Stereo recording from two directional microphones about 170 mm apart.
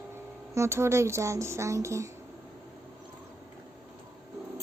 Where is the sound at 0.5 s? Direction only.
15° right (ahead or behind).